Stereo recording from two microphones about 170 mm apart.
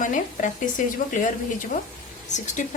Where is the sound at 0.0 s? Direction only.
50° left (ahead or behind).